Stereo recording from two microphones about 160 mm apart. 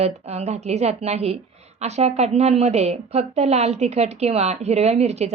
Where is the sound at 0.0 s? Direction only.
40° right (ahead or behind).